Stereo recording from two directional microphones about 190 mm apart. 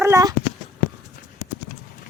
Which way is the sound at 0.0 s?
15° right (ahead or behind).